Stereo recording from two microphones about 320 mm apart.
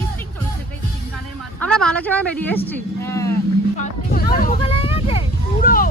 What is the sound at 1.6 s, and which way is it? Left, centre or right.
A woman's voice, centre.